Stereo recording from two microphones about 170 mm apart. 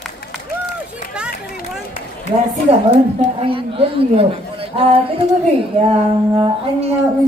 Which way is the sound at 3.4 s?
30° right (ahead or behind).